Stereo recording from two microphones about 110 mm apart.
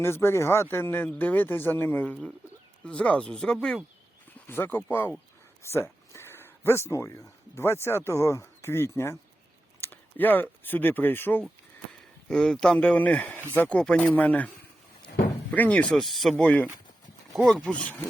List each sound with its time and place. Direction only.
0.0 s speech: 25° left (ahead or behind); by 3.8 s 5° left (ahead or behind)
4.4 s speech: 20° left (ahead or behind)
5.6 s a sound: 25° left (ahead or behind)
7.5 s speech: 25° left (ahead or behind)
12.3 s speech: 5° left (ahead or behind)
15.5 s speech: 10° left (ahead or behind)
16.4 s speech: 10° left (ahead or behind)